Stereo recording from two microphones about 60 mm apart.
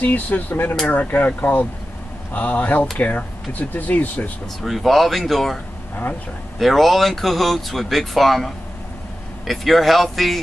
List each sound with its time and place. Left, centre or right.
0.0 s speech: left
4.6 s speech: centre
6.6 s speech: centre